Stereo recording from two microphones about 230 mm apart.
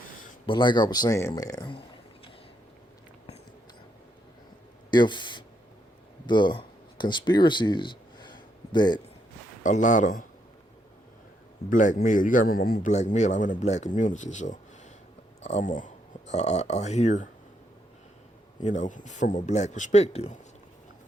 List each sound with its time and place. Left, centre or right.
0.4 s speech: left
4.9 s speech: centre
9.6 s a man's voice: left
11.7 s a man's voice: left
18.6 s a man's voice: left